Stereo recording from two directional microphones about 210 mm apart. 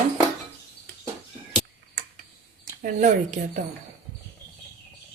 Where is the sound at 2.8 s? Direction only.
35° right (ahead or behind).